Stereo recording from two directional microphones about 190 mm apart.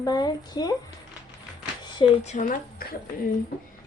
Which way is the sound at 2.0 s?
25° left (ahead or behind).